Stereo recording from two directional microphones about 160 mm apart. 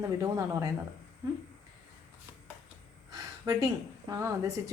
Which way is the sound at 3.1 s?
20° right (ahead or behind).